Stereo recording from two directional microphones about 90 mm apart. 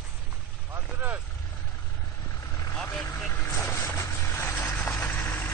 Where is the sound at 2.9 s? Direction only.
25° left (ahead or behind).